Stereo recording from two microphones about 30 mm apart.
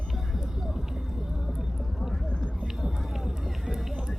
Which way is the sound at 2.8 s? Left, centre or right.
Centre.